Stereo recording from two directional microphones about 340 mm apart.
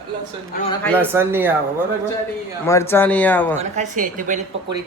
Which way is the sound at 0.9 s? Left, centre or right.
Centre.